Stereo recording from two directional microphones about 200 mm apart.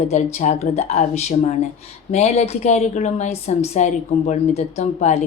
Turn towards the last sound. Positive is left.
turn(degrees=30)  # may be behind; listen again after turning